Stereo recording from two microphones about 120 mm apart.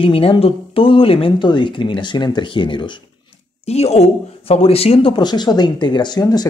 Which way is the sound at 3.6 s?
60° left (ahead or behind).